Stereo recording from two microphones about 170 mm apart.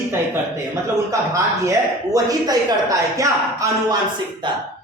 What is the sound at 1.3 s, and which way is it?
A man's voice, 20° right (ahead or behind).